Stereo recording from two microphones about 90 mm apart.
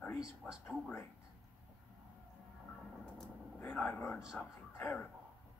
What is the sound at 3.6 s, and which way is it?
Speech, 15° left (ahead or behind).